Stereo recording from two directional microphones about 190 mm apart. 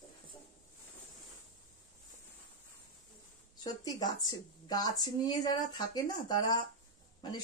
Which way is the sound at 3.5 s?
20° left (ahead or behind).